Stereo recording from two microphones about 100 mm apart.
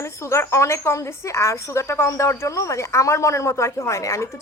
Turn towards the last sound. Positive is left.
turn(degrees=30)  # may be behind; listen again after turning